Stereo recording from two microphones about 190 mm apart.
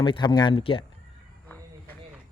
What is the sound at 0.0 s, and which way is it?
Speech, 25° left (ahead or behind).